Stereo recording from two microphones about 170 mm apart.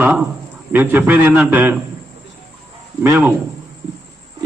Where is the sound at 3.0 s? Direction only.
15° right (ahead or behind).